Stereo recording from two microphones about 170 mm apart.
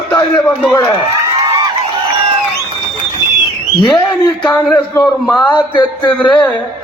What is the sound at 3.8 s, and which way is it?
Speech, 25° left (ahead or behind).